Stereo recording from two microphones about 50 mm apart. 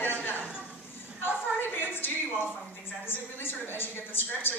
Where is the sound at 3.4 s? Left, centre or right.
Left.